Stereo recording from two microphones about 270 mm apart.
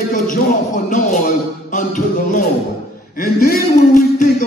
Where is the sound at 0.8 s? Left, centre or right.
Left.